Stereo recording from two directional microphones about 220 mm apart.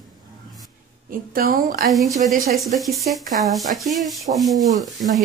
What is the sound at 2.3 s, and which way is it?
Speech, 40° right (ahead or behind).